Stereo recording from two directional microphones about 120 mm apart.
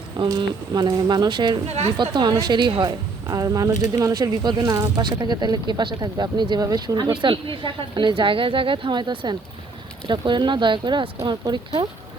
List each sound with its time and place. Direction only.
0.2 s speech: 35° right (ahead or behind)